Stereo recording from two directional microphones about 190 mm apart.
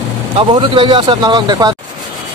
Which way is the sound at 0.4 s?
25° right (ahead or behind).